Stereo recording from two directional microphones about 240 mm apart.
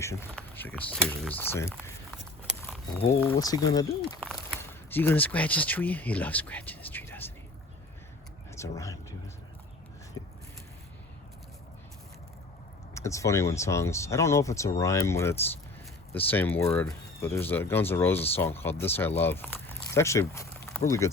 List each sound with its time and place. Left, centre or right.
0.0 s speech: centre
2.6 s a sound: centre
3.2 s speech: centre
4.2 s speech: centre
8.5 s speech: centre
10.2 s a sound: centre
12.9 s speech: centre